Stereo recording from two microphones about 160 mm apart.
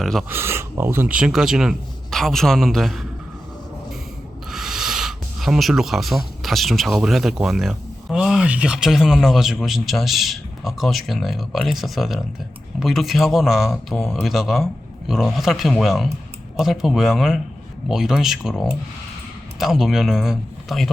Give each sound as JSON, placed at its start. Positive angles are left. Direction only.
{"t": 0.0, "sound": "speech", "side_deg": 5}
{"t": 0.3, "sound": "speech", "side_deg": -15}
{"t": 4.5, "sound": "speech", "side_deg": -5}